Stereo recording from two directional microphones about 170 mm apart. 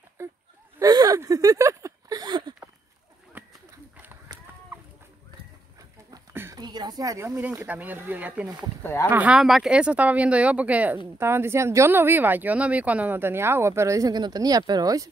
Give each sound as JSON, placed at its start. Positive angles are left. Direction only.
{"t": 0.2, "sound": "a sound", "side_deg": -15}
{"t": 3.3, "sound": "a sound", "side_deg": -10}
{"t": 4.3, "sound": "run", "side_deg": -25}
{"t": 6.1, "sound": "speech", "side_deg": -20}
{"t": 8.8, "sound": "speech", "side_deg": 15}
{"t": 9.1, "sound": "speech", "side_deg": -5}